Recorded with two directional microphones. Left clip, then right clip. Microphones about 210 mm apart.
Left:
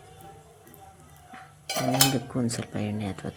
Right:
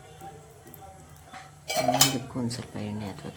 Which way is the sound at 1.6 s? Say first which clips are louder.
Right 1 dB; 25° left (ahead or behind).